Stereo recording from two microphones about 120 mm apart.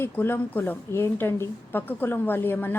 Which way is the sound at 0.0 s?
20° left (ahead or behind).